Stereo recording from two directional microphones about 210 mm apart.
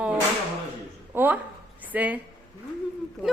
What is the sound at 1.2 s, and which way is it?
A woman's voice, 10° right (ahead or behind).